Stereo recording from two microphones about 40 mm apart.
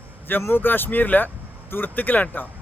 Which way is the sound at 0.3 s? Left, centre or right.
Left.